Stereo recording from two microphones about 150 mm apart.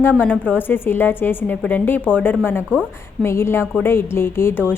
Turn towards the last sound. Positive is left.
turn(degrees=15)  # may be behind; listen again after turning